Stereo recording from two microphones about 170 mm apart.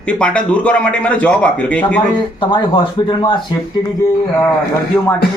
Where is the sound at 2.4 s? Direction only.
25° left (ahead or behind).